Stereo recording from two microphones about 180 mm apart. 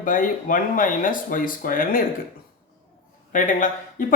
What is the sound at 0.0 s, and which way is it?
Speech, 50° left (ahead or behind).